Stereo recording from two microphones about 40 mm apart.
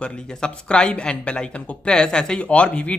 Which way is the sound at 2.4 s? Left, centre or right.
Left.